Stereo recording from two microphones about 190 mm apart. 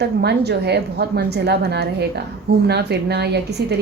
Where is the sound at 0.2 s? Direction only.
60° right (ahead or behind).